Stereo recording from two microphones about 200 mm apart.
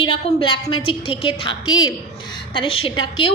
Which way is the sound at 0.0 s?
25° left (ahead or behind).